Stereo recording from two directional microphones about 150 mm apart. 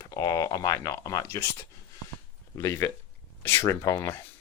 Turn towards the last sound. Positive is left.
turn(degrees=15)  # may be behind; listen again after turning